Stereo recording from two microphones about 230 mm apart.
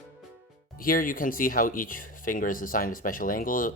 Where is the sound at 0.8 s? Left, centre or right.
Left.